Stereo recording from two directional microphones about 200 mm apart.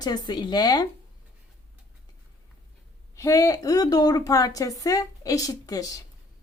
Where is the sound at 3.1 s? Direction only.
15° left (ahead or behind).